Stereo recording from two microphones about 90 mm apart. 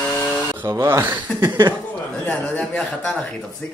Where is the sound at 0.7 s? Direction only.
35° right (ahead or behind).